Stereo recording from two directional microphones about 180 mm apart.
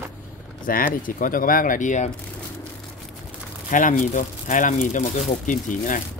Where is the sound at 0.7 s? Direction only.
50° left (ahead or behind).